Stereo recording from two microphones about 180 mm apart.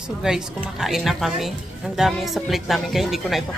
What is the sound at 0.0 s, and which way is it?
A woman's voice, 5° right (ahead or behind).